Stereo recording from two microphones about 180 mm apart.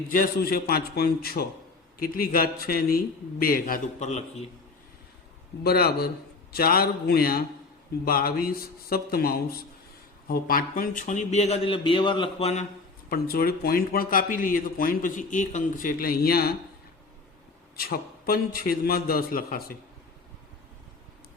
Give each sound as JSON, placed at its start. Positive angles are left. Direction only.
{"t": 0.1, "sound": "a man's voice", "side_deg": 55}
{"t": 5.6, "sound": "a man's voice", "side_deg": 60}
{"t": 13.1, "sound": "a man's voice", "side_deg": 60}
{"t": 17.7, "sound": "a man's voice", "side_deg": 55}